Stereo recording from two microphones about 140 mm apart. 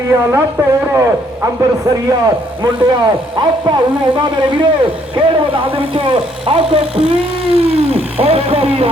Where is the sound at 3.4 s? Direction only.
35° right (ahead or behind).